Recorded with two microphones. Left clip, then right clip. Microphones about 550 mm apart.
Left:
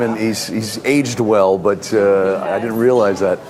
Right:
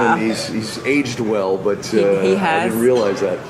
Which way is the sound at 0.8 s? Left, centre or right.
Left.